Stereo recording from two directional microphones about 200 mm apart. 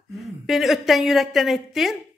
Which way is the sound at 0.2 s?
Centre (ahead or behind).